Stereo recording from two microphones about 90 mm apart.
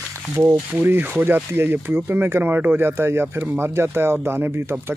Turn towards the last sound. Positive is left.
turn(degrees=-25)  # may be behind; listen again after turning